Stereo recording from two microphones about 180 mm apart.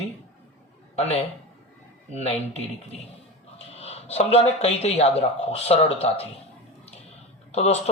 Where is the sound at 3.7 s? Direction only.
35° left (ahead or behind).